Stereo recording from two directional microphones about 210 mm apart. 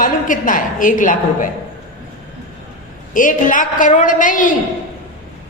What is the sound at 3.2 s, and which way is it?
A woman's voice, 40° left (ahead or behind).